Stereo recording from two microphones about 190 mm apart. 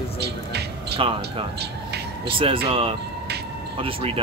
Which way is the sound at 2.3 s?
25° right (ahead or behind).